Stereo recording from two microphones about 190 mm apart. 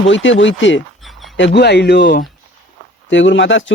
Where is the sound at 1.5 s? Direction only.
60° left (ahead or behind).